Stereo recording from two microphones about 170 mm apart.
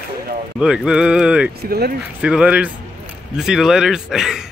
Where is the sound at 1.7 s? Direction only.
65° right (ahead or behind).